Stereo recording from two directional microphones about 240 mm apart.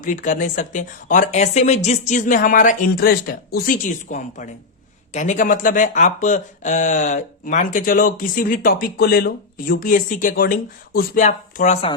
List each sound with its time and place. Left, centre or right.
0.0 s speech: left